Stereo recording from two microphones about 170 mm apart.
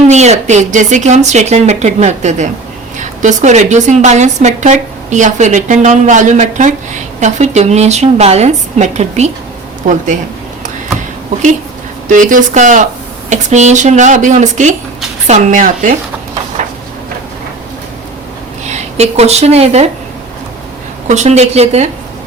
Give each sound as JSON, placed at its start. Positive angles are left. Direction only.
{"t": 0.1, "sound": "a woman's voice", "side_deg": -40}
{"t": 12.0, "sound": "a woman's voice", "side_deg": -50}
{"t": 18.7, "sound": "speech", "side_deg": -40}
{"t": 21.1, "sound": "a woman's voice", "side_deg": -40}